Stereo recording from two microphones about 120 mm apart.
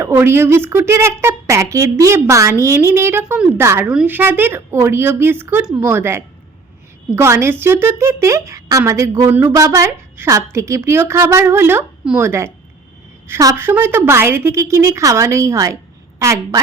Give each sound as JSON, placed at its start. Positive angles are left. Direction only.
{"t": 0.0, "sound": "a woman's voice", "side_deg": -20}
{"t": 5.6, "sound": "a woman's voice", "side_deg": -5}
{"t": 5.9, "sound": "a woman's voice", "side_deg": -20}